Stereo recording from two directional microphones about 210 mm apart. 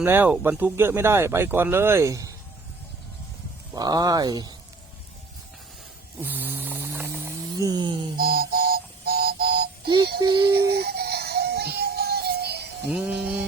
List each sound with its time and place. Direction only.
0.0 s speech: 10° right (ahead or behind)
3.8 s speech: 20° right (ahead or behind)
6.1 s a sound: 10° right (ahead or behind)
7.6 s speech: 20° right (ahead or behind)
8.2 s music: 45° right (ahead or behind)
10.2 s speech: 20° right (ahead or behind)
10.7 s music: 50° right (ahead or behind)
12.9 s sheep: 5° right (ahead or behind)